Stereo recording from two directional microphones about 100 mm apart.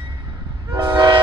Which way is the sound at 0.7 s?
45° right (ahead or behind).